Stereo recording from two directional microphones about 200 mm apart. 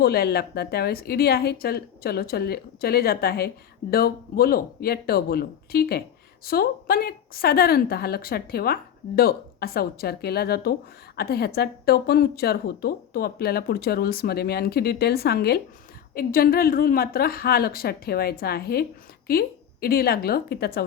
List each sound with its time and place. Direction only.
0.0 s speech: 50° left (ahead or behind)